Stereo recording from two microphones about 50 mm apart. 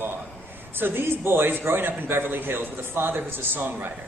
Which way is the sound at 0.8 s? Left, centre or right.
Right.